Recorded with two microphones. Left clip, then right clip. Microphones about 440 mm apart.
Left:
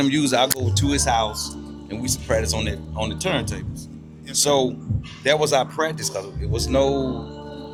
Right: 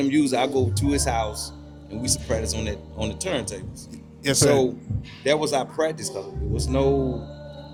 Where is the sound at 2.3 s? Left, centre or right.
Centre.